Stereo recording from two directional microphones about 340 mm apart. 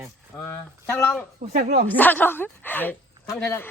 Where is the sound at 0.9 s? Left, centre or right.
Centre.